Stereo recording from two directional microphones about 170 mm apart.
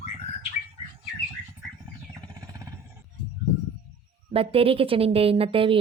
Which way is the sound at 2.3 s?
20° right (ahead or behind).